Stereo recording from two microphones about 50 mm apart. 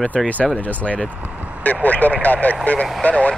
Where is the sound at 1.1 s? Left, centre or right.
Right.